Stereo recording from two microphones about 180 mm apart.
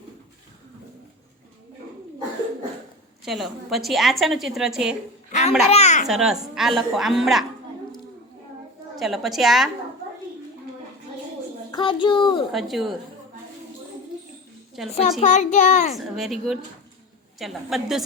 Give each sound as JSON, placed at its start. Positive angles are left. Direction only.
{"t": 3.2, "sound": "a woman's voice", "side_deg": 0}
{"t": 5.3, "sound": "babbling", "side_deg": 40}
{"t": 5.6, "sound": "a child's voice", "side_deg": 40}
{"t": 6.1, "sound": "a woman's voice", "side_deg": 0}
{"t": 9.0, "sound": "a woman's voice", "side_deg": 0}
{"t": 11.7, "sound": "a child's voice", "side_deg": 25}
{"t": 12.5, "sound": "a woman's voice", "side_deg": 0}
{"t": 14.8, "sound": "a woman's voice", "side_deg": 0}
{"t": 15.2, "sound": "a child's voice", "side_deg": 40}
{"t": 15.9, "sound": "a woman's voice", "side_deg": 0}